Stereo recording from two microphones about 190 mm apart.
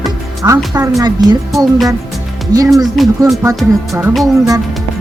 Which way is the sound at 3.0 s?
Centre (ahead or behind).